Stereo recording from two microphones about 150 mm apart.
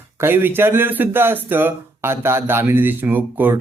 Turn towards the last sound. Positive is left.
turn(degrees=-10)  # may be behind; listen again after turning